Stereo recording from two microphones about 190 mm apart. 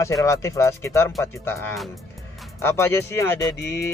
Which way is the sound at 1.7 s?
Centre (ahead or behind).